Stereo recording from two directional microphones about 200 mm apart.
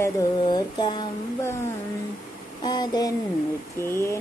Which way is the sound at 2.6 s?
20° left (ahead or behind).